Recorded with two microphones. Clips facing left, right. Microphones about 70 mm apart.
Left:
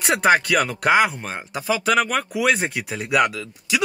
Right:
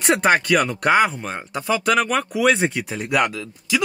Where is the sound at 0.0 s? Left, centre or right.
Centre.